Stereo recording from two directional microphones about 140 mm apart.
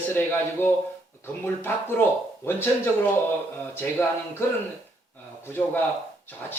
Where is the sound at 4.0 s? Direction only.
15° left (ahead or behind).